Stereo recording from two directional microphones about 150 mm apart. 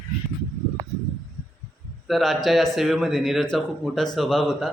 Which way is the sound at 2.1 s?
Centre (ahead or behind).